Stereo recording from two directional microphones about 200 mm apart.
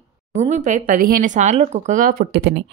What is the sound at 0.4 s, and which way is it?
Speech, 35° right (ahead or behind).